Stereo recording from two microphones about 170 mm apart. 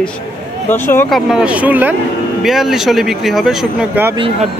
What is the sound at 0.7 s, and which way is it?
Speech, 10° left (ahead or behind).